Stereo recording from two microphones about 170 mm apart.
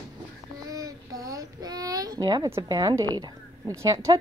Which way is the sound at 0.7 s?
20° right (ahead or behind).